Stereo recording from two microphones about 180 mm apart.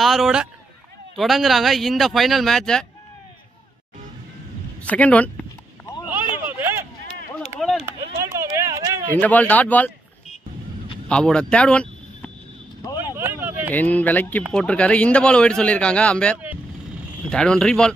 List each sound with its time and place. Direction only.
0.0 s speech: centre (ahead or behind)
4.8 s a man's voice: 10° left (ahead or behind)
6.3 s a sound: 10° right (ahead or behind)
7.6 s chop: centre (ahead or behind)
8.3 s a sound: 15° right (ahead or behind)
9.1 s a man's voice: 10° left (ahead or behind)
11.1 s speech: 5° left (ahead or behind)
13.1 s a sound: 10° right (ahead or behind)
13.7 s a man's voice: 10° left (ahead or behind)